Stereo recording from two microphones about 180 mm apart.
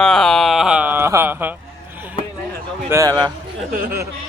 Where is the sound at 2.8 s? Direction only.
15° right (ahead or behind).